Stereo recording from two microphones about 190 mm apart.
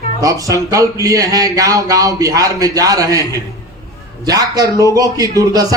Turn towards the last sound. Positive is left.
turn(degrees=-20)  # may be behind; listen again after turning